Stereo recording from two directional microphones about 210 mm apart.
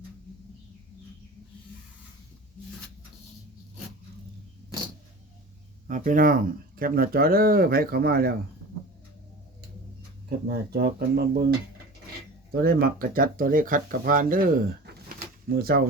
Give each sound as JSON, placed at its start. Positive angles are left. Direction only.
{"t": 5.9, "sound": "speech", "side_deg": -40}
{"t": 10.2, "sound": "speech", "side_deg": -50}
{"t": 12.6, "sound": "speech", "side_deg": -45}